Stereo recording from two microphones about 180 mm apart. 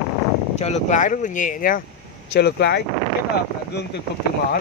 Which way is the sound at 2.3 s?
65° left (ahead or behind).